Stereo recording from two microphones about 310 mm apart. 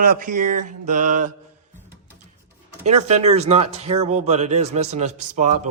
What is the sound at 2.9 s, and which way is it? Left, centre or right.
Speech, right.